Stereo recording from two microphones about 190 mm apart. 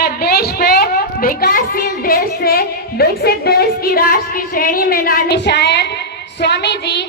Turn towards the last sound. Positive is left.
turn(degrees=60)  # may be behind; listen again after turning